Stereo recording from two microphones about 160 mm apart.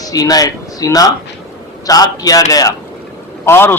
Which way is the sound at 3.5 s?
15° left (ahead or behind).